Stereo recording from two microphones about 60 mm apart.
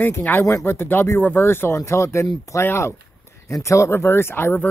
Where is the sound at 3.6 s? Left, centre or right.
Left.